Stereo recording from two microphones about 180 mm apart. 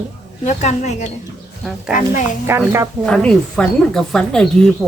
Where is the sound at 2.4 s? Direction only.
15° right (ahead or behind).